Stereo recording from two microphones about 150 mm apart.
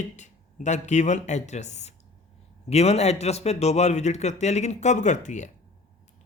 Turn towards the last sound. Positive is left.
turn(degrees=50)  # may be behind; listen again after turning